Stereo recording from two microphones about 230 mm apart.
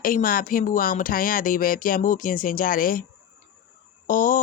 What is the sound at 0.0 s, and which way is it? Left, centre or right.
A woman's voice, left.